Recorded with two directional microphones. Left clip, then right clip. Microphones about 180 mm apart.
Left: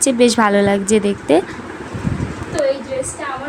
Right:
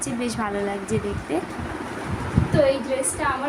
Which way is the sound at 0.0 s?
50° left (ahead or behind).